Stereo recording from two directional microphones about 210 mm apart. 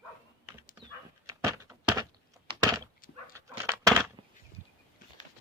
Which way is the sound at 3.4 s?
15° right (ahead or behind).